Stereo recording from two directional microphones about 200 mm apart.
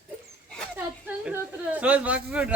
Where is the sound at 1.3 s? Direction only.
5° right (ahead or behind).